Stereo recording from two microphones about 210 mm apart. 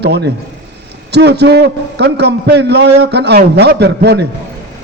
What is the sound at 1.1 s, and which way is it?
A man's voice, 50° right (ahead or behind).